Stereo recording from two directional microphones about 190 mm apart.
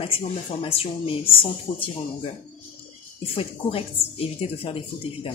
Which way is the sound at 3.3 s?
30° left (ahead or behind).